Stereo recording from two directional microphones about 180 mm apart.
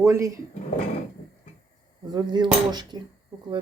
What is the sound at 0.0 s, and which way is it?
Speech, 15° right (ahead or behind).